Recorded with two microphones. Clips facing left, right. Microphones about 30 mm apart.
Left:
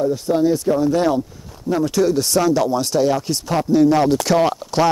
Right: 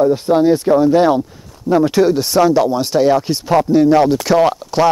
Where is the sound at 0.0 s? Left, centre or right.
Right.